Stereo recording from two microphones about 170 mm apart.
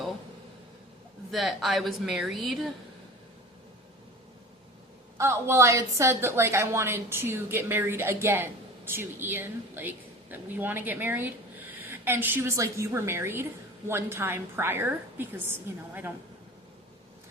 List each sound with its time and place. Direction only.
1.3 s speech: centre (ahead or behind)
5.1 s a woman's voice: 15° right (ahead or behind)